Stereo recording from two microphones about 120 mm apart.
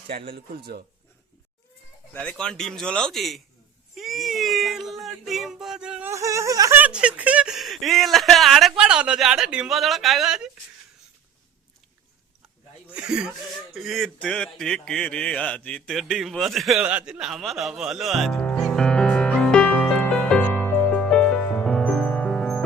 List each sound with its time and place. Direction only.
2.1 s speech: 5° left (ahead or behind)
6.1 s a sound: 25° right (ahead or behind)
6.7 s speech: 10° right (ahead or behind)
12.9 s speech: 5° right (ahead or behind); by 15.8 s 10° left (ahead or behind)
15.9 s speech: centre (ahead or behind)
16.8 s music: 10° right (ahead or behind); by 22.6 s 5° left (ahead or behind)